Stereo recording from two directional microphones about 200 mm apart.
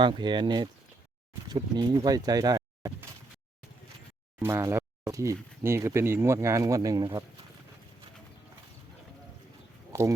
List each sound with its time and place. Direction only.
0.0 s speech: 25° right (ahead or behind)
4.4 s speech: 15° right (ahead or behind)
9.9 s speech: 15° right (ahead or behind)